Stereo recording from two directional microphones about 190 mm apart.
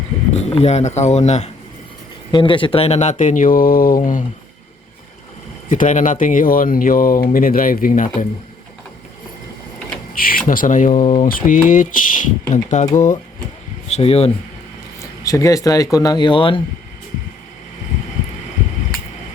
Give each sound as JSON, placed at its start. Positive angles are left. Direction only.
{"t": 0.3, "sound": "speech", "side_deg": 35}
{"t": 2.3, "sound": "speech", "side_deg": 25}
{"t": 5.6, "sound": "speech", "side_deg": 45}
{"t": 10.2, "sound": "speech", "side_deg": 50}
{"t": 15.2, "sound": "speech", "side_deg": 15}